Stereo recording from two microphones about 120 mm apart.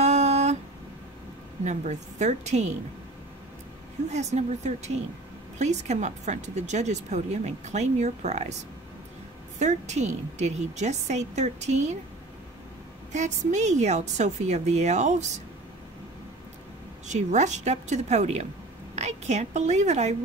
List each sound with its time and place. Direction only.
0.0 s a sound: 70° right (ahead or behind)
1.6 s speech: 80° right
4.1 s speech: 70° right (ahead or behind)
9.6 s speech: 75° right (ahead or behind)
13.1 s speech: 80° right
17.1 s a woman's voice: 80° right